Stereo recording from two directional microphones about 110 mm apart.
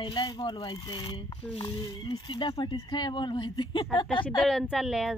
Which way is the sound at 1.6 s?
55° left (ahead or behind).